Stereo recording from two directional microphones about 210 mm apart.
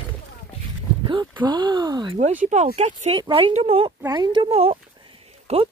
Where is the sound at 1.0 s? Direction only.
25° right (ahead or behind).